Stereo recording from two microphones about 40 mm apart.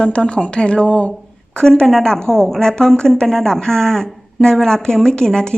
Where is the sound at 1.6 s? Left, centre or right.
Centre.